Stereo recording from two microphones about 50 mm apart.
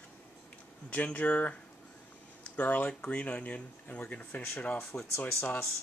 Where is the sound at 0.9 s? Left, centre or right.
Left.